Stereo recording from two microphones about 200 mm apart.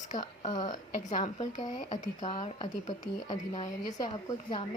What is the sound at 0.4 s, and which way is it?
Speech, 20° left (ahead or behind).